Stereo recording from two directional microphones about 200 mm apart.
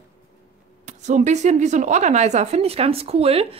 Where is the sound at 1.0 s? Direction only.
35° right (ahead or behind).